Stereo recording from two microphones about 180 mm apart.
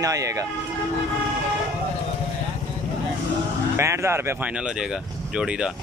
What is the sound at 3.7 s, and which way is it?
Speech, 15° right (ahead or behind).